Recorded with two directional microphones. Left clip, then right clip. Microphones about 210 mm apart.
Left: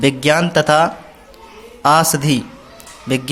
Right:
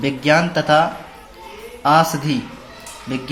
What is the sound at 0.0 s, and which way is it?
Speech, 40° left (ahead or behind).